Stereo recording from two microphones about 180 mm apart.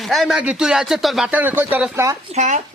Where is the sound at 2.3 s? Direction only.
40° right (ahead or behind).